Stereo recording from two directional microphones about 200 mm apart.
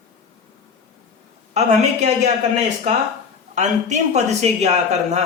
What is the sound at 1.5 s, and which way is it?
Speech, 35° right (ahead or behind).